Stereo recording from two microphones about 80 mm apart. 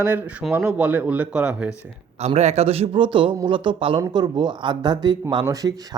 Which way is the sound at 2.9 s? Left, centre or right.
Right.